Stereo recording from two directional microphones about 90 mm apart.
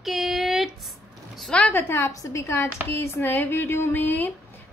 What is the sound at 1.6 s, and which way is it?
A woman's voice, 25° left (ahead or behind).